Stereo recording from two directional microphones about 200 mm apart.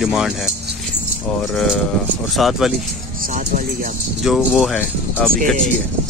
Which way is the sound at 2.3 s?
Centre (ahead or behind).